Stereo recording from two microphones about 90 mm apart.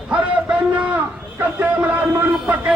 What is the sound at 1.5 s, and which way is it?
A man's voice, 15° right (ahead or behind).